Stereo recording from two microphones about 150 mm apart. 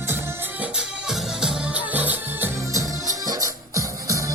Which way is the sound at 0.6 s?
5° right (ahead or behind).